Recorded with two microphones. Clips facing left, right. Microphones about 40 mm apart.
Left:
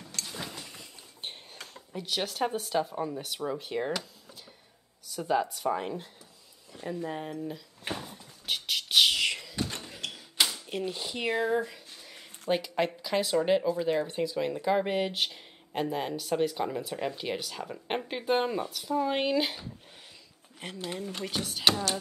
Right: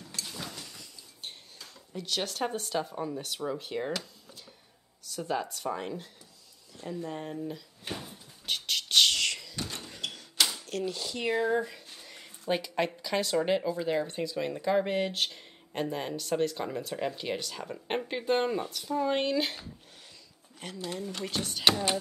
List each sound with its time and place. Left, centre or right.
0.4 s a sound: left
2.0 s speech: centre
8.0 s door: centre
9.8 s a sound: centre
10.1 s typewriter: centre
10.7 s speech: centre
11.5 s a sound: centre
13.7 s speech: centre
20.6 s speech: left
21.2 s speech: centre